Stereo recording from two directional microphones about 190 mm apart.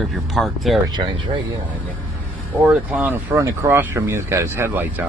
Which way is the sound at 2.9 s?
10° right (ahead or behind).